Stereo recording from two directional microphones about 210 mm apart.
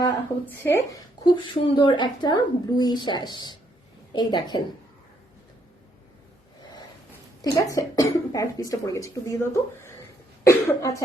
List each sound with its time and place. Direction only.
0.0 s speech: 10° left (ahead or behind)
7.4 s speech: 15° left (ahead or behind)